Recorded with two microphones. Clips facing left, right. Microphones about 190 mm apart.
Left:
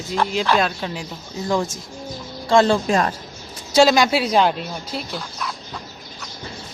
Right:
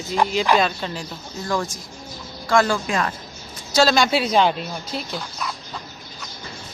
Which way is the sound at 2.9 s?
35° left (ahead or behind).